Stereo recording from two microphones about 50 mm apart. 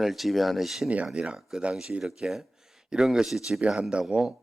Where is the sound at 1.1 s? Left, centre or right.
Centre.